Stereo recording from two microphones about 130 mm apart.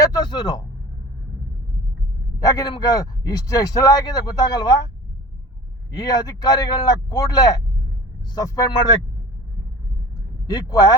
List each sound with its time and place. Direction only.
0.0 s a sound: 30° left (ahead or behind)
2.4 s speech: 25° left (ahead or behind)
5.9 s speech: 30° left (ahead or behind)
10.4 s speech: 30° left (ahead or behind)